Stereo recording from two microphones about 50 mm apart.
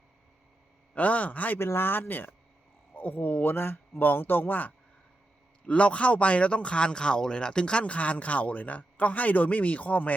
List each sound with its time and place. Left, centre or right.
0.9 s speech: left
1.5 s speech: left
5.6 s speech: left